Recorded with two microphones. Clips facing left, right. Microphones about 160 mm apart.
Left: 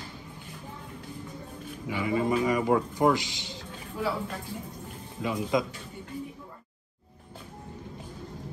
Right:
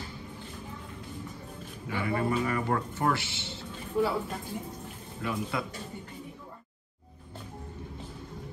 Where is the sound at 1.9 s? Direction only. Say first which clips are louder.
Left 3 dB; 15° left (ahead or behind).